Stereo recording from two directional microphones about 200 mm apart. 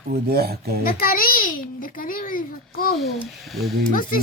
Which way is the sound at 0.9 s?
45° left (ahead or behind).